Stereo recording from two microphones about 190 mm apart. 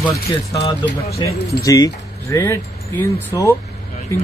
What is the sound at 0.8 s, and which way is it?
Speech, 15° left (ahead or behind).